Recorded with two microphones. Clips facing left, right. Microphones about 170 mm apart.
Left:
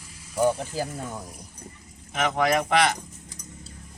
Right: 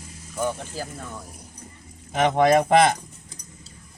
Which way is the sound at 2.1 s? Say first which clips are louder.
Right 5 dB; 25° right (ahead or behind).